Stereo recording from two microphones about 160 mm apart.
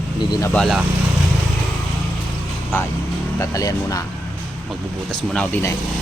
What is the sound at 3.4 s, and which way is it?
Speech, 20° left (ahead or behind).